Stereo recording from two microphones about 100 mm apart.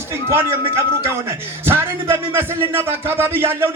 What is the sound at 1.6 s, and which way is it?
Speech, 20° right (ahead or behind).